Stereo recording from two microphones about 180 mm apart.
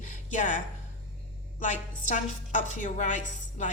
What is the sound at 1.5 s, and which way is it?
A woman's voice, 45° left (ahead or behind).